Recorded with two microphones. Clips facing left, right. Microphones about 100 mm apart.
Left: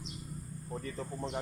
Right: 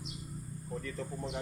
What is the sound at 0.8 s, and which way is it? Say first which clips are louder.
Speech: left 1 dB; 40° left (ahead or behind).